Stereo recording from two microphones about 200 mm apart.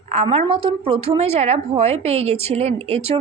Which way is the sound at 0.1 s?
35° right (ahead or behind).